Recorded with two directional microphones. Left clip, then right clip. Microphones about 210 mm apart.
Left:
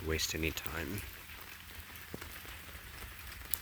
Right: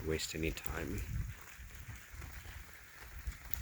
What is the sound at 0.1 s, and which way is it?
Speech, 5° left (ahead or behind).